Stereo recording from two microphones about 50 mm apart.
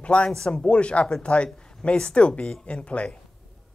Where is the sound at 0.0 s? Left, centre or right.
Left.